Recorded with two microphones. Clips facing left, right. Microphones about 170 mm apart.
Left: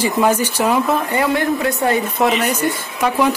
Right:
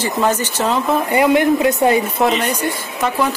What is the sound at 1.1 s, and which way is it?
Speech, 15° right (ahead or behind).